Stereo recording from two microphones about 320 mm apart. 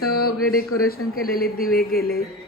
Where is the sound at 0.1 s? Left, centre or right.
Left.